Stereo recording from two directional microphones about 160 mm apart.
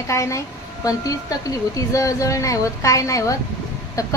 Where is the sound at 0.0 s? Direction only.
20° left (ahead or behind).